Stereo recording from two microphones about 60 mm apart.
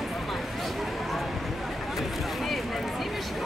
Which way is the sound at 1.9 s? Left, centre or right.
Centre.